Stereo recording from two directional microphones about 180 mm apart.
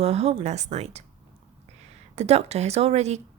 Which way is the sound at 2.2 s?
35° right (ahead or behind).